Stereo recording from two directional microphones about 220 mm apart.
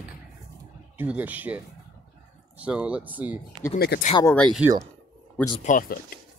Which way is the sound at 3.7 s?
45° left (ahead or behind).